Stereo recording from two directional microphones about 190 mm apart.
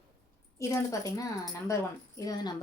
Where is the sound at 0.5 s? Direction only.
15° left (ahead or behind).